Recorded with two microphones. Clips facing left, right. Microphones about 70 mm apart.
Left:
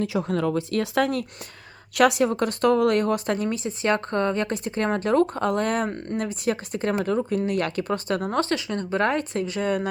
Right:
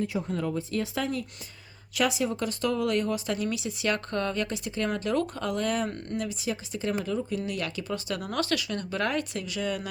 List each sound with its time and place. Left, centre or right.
0.0 s speech: left
4.4 s speech: left